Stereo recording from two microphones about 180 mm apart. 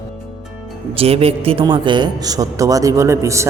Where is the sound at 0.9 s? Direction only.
35° right (ahead or behind).